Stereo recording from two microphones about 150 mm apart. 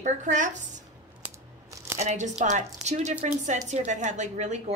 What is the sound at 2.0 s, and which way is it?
A woman's voice, 50° right (ahead or behind).